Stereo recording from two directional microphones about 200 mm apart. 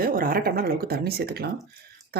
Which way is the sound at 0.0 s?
45° right (ahead or behind).